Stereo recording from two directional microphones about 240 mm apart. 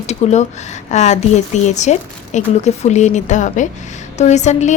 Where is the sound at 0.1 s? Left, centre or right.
Left.